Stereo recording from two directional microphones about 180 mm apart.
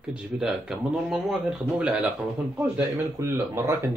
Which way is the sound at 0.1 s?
5° right (ahead or behind).